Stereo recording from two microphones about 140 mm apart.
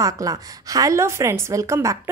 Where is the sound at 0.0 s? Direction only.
25° right (ahead or behind).